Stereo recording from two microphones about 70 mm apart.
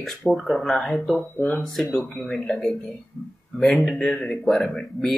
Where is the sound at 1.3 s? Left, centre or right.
Centre.